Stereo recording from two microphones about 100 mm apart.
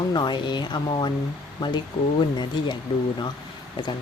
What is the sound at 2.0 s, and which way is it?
Speech, 60° left (ahead or behind).